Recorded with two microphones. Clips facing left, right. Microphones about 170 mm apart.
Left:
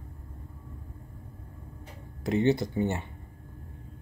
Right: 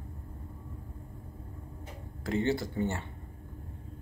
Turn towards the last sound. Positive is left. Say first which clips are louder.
# left 3 dB
turn(degrees=15)  # may be behind; listen again after turning